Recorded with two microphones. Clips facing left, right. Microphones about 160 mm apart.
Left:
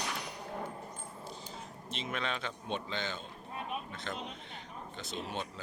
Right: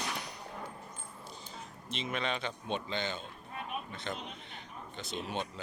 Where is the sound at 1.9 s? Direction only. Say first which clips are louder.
Right 2 dB; centre (ahead or behind).